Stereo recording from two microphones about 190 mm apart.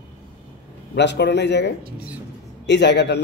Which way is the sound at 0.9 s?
65° left (ahead or behind).